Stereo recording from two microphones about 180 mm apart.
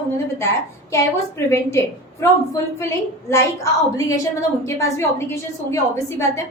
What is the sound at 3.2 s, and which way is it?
A woman's voice, 15° left (ahead or behind).